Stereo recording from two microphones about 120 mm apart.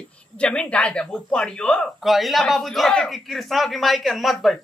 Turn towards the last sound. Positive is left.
turn(degrees=0)  # may be behind; listen again after turning